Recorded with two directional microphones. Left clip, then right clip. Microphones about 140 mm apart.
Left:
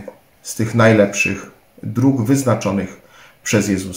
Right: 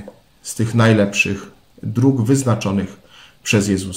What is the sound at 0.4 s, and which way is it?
Speech, 10° right (ahead or behind).